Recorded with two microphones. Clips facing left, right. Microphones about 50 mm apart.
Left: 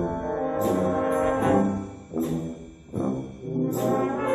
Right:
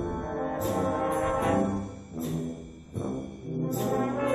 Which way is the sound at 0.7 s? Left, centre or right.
Centre.